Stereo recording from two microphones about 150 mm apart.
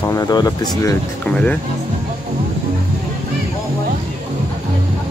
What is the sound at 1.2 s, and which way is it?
Speech, 10° left (ahead or behind).